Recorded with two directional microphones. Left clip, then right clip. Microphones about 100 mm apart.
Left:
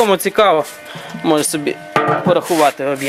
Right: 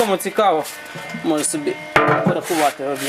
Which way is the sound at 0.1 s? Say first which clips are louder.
Left 5 dB; 30° left (ahead or behind).